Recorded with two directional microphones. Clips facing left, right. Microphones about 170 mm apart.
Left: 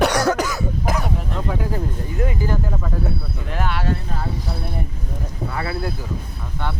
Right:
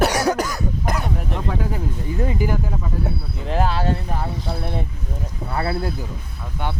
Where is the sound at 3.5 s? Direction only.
30° right (ahead or behind).